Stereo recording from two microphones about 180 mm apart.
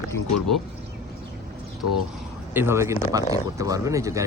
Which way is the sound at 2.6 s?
15° right (ahead or behind).